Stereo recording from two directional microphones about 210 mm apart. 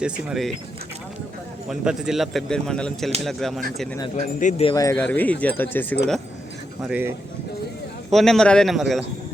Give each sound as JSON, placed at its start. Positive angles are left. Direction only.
{"t": 0.0, "sound": "speech", "side_deg": 0}
{"t": 1.7, "sound": "speech", "side_deg": -5}
{"t": 4.1, "sound": "speech", "side_deg": 35}
{"t": 4.7, "sound": "speech", "side_deg": 15}
{"t": 6.8, "sound": "speech", "side_deg": -5}
{"t": 8.1, "sound": "speech", "side_deg": 0}